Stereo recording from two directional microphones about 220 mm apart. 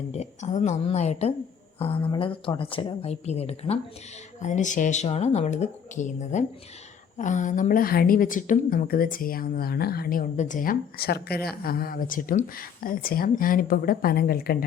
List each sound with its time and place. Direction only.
0.1 s a woman's voice: 30° left (ahead or behind)